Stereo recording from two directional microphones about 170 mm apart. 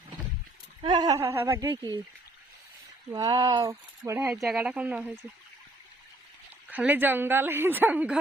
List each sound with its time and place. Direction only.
0.8 s speech: 25° right (ahead or behind)
3.1 s speech: 20° right (ahead or behind)
4.3 s speech: 5° right (ahead or behind)
6.7 s speech: 10° right (ahead or behind)